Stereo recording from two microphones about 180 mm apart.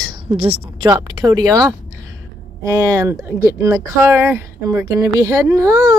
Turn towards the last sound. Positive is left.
turn(degrees=-15)  # may be behind; listen again after turning